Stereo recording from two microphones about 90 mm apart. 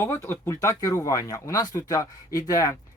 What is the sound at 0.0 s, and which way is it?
Speech, 30° left (ahead or behind).